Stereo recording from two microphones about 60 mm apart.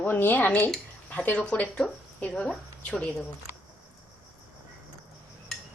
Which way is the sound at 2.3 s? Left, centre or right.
Centre.